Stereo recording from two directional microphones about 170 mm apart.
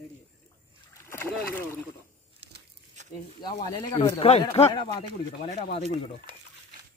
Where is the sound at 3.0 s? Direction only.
45° right (ahead or behind).